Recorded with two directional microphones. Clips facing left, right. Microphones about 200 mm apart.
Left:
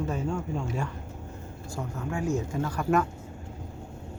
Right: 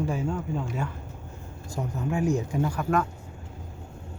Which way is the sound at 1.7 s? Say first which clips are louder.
Right 4 dB; 20° right (ahead or behind).